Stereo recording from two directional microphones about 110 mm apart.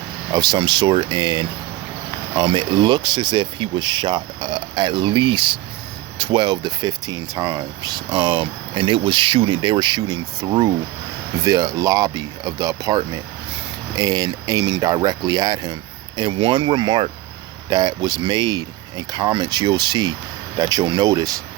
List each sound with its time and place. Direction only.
0.3 s speech: 40° right (ahead or behind)